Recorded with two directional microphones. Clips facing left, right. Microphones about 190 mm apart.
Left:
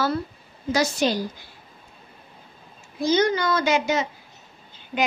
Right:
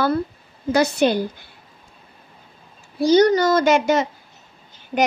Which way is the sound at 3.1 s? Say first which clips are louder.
Right 6 dB; 40° right (ahead or behind).